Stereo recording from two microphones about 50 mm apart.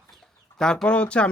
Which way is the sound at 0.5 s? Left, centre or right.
Centre.